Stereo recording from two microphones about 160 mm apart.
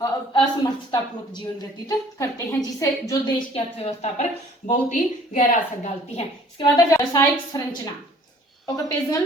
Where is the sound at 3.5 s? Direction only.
40° left (ahead or behind).